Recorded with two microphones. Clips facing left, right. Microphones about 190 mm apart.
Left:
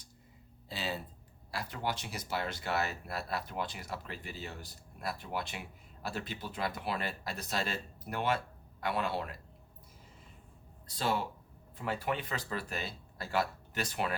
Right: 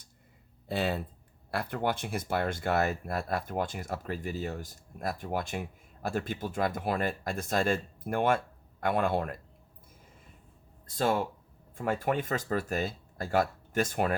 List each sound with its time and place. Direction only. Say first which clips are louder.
0.7 s speech: right 8 dB; 55° right (ahead or behind)
10.8 s speech: right 5 dB; 50° right (ahead or behind)